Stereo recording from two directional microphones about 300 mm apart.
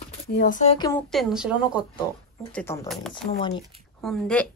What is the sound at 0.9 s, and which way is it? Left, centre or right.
Speech, centre.